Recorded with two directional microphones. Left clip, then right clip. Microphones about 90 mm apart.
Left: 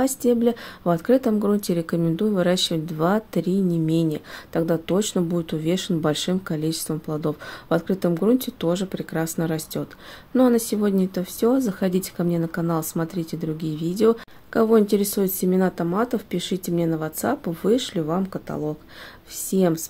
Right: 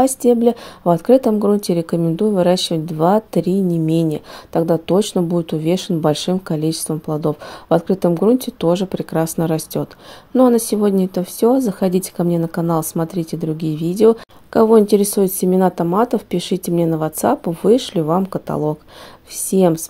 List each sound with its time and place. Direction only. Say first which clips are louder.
0.0 s a woman's voice: right 7 dB; 50° right (ahead or behind)
17.5 s a woman's voice: right 7 dB; 50° right (ahead or behind)
18.1 s speech: right 8 dB; 75° right (ahead or behind)
19.5 s a woman's voice: right 7 dB; 55° right (ahead or behind)